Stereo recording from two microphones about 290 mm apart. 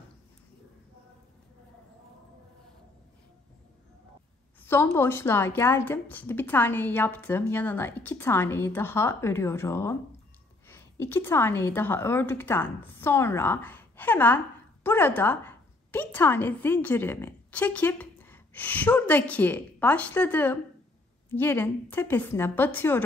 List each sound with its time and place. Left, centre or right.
4.6 s a woman's voice: centre